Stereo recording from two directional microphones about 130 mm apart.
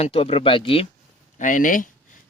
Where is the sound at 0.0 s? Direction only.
45° left (ahead or behind).